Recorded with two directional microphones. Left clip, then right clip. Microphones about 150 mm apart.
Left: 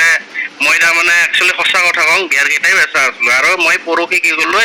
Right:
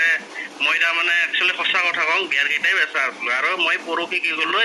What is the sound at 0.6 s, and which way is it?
A man's voice, 25° left (ahead or behind).